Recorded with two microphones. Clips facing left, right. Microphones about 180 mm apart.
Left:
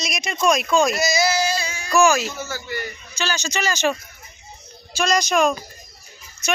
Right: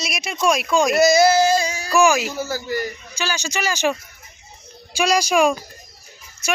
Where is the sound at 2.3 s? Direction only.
35° right (ahead or behind).